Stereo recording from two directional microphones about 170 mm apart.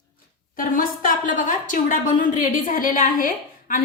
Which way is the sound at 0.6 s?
55° left (ahead or behind).